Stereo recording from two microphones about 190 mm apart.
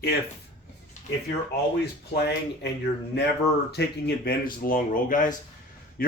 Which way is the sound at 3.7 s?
60° left (ahead or behind).